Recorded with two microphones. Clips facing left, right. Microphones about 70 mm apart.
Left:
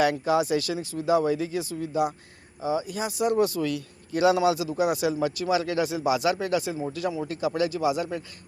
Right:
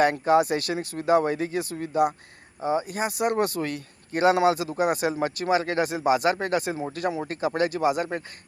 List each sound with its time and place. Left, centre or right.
0.0 s speech: right